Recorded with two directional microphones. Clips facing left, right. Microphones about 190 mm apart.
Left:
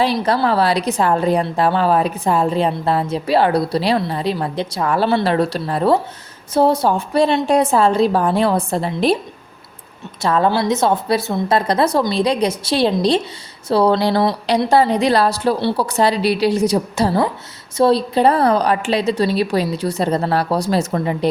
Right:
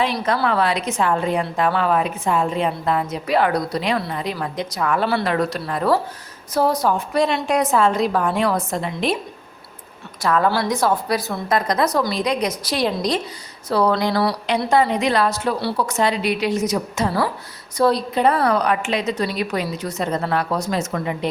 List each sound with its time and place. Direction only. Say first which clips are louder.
0.0 s a woman's voice: left 4 dB; 35° left (ahead or behind)
10.2 s a woman's voice: left 3 dB; 25° left (ahead or behind)